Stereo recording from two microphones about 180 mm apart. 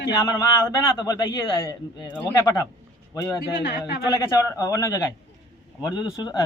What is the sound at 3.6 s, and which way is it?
Speech, 70° left (ahead or behind).